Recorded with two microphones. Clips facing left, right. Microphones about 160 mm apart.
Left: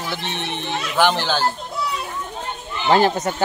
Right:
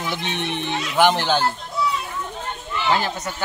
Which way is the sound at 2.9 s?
45° left (ahead or behind).